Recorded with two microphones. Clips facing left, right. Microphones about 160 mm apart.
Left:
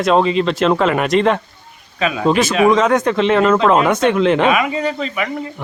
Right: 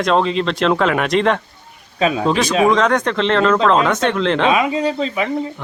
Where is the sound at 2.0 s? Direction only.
35° right (ahead or behind).